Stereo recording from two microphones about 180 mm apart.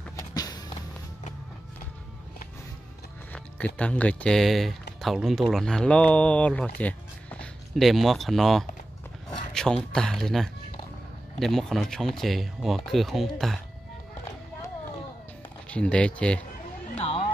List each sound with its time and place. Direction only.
0.3 s music: 20° left (ahead or behind)
3.3 s speech: 10° left (ahead or behind)
15.7 s speech: 5° left (ahead or behind)
16.9 s a sound: 30° left (ahead or behind)